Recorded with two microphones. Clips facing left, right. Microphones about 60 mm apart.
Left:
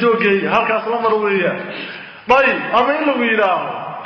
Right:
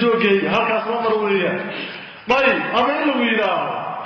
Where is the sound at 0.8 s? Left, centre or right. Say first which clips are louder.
Left 3 dB; left.